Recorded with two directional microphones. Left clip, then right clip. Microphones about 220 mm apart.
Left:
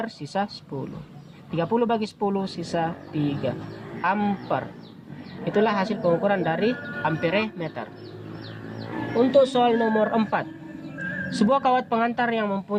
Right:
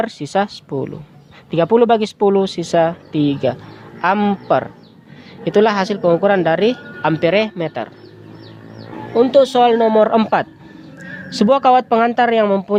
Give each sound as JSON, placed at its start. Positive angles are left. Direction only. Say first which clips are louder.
{"t": 0.0, "sound": "speech", "louder": "right 10 dB", "side_deg": -45}
{"t": 9.1, "sound": "speech", "louder": "right 7 dB", "side_deg": -45}